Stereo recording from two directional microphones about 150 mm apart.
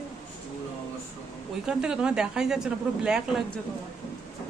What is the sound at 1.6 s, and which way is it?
Speech, 5° right (ahead or behind).